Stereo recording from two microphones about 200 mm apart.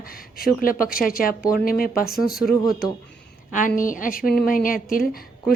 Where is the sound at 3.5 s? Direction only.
40° left (ahead or behind).